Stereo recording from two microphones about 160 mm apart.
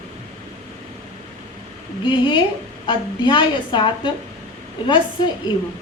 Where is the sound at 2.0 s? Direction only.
30° left (ahead or behind).